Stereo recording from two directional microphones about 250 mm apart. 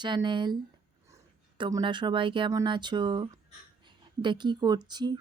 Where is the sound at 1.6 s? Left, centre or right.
Centre.